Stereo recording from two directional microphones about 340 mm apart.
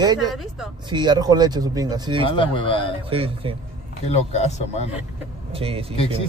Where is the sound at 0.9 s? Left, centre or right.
Centre.